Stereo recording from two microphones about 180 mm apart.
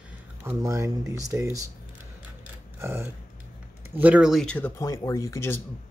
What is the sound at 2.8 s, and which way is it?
Speech, 15° right (ahead or behind).